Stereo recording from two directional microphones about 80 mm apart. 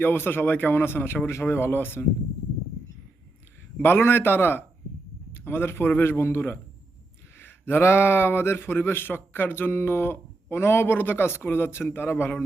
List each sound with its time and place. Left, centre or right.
0.0 s a man's voice: left
3.8 s a man's voice: left